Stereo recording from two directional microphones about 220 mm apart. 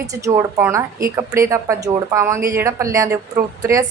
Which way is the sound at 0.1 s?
15° right (ahead or behind).